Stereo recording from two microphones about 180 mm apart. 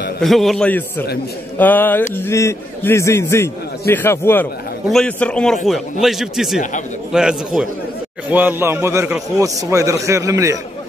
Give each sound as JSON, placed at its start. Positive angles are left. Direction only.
{"t": 0.2, "sound": "a man's voice", "side_deg": 0}